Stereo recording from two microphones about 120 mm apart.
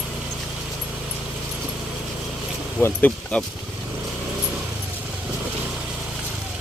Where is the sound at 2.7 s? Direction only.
15° left (ahead or behind).